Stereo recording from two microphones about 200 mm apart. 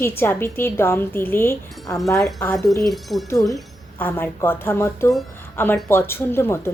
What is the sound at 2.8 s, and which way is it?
Speech, centre (ahead or behind).